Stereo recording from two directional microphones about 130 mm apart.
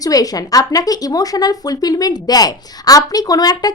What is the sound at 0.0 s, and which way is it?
Speech, 30° left (ahead or behind).